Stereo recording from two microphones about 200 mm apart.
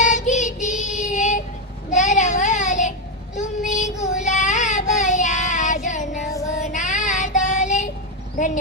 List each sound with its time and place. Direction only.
0.0 s child singing: 40° left (ahead or behind)